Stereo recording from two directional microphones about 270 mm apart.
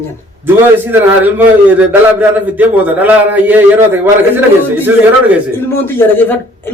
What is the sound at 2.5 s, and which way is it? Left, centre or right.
Speech, centre.